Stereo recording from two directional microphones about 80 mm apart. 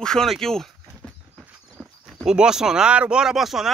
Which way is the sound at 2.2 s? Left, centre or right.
Centre.